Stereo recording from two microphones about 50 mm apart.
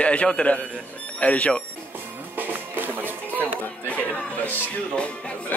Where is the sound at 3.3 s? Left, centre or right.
Left.